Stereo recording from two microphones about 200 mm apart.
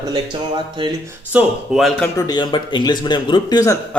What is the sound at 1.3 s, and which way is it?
Speech, 5° right (ahead or behind).